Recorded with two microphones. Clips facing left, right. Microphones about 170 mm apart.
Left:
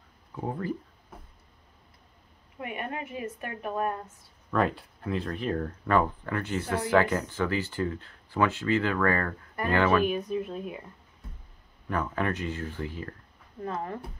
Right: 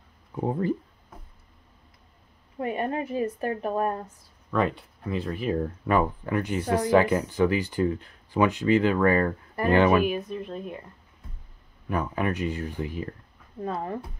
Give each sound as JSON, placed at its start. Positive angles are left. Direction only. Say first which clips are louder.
{"t": 0.4, "sound": "speech", "louder": "right 6 dB", "side_deg": -25}
{"t": 2.6, "sound": "a woman's voice", "louder": "right 7 dB", "side_deg": -35}
{"t": 4.5, "sound": "speech", "louder": "right 1 dB", "side_deg": 0}
{"t": 5.6, "sound": "speech", "louder": "right 1 dB", "side_deg": -15}
{"t": 10.0, "sound": "speech", "louder": "even", "side_deg": 0}
{"t": 11.9, "sound": "speech", "louder": "right 2 dB", "side_deg": -10}